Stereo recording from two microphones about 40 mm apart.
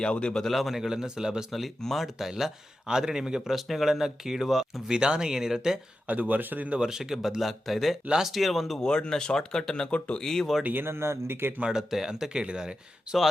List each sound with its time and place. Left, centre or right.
0.0 s speech: left
0.4 s speech: centre
1.8 s speech: centre
2.8 s speech: centre
3.5 s speech: centre
4.9 s speech: right
6.1 s speech: right
6.7 s speech: centre
8.8 s speech: centre
10.6 s speech: right
10.8 s speech: right
11.8 s speech: centre